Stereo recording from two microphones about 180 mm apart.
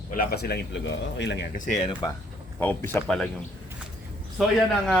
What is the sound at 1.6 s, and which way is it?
Speech, 45° left (ahead or behind).